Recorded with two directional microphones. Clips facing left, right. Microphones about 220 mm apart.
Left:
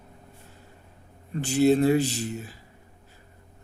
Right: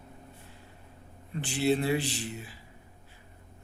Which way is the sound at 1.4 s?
45° left (ahead or behind).